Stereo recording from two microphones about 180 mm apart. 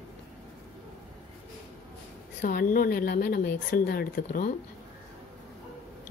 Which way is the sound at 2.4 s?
50° left (ahead or behind).